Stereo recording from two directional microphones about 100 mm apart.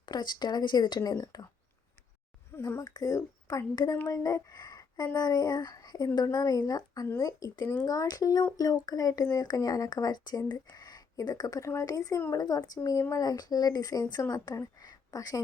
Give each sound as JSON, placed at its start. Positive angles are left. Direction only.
{"t": 0.0, "sound": "a woman's voice", "side_deg": 45}
{"t": 2.6, "sound": "speech", "side_deg": 25}
{"t": 2.8, "sound": "a woman's voice", "side_deg": 35}